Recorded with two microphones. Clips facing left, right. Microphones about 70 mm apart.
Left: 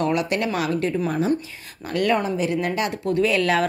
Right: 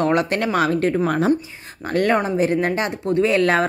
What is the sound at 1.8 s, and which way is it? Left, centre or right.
A woman's voice, right.